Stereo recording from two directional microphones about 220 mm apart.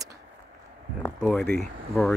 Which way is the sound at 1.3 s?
5° left (ahead or behind).